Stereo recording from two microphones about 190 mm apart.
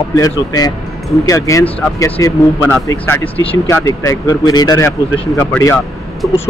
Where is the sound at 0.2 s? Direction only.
20° left (ahead or behind).